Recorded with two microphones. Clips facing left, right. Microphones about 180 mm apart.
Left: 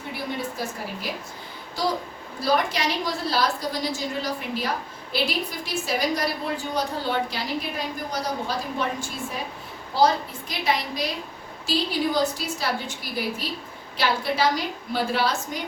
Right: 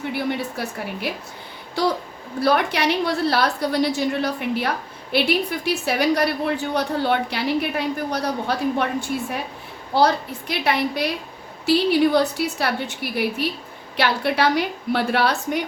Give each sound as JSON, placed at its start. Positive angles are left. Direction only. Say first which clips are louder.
{"t": 0.1, "sound": "a woman's voice", "louder": "right 3 dB", "side_deg": -65}
{"t": 2.4, "sound": "a woman's voice", "louder": "right 4 dB", "side_deg": -65}